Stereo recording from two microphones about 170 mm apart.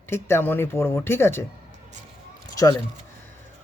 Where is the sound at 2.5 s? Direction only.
20° left (ahead or behind).